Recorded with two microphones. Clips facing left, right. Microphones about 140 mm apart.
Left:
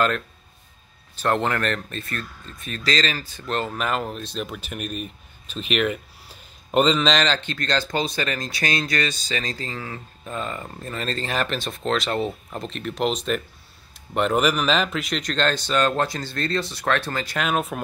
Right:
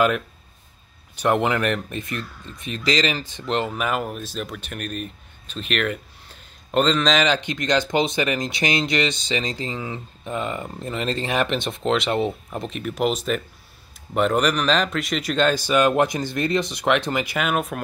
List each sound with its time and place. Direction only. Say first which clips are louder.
1.1 s speech: right 2 dB; 15° right (ahead or behind)
7.2 s speech: right 3 dB; 15° right (ahead or behind)